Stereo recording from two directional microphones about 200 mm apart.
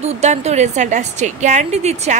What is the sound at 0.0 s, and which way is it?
A woman's voice, 35° right (ahead or behind).